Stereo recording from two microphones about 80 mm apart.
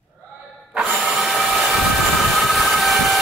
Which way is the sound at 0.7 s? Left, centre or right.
Centre.